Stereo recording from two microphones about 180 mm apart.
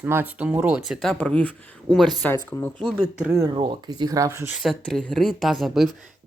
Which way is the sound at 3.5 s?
25° right (ahead or behind).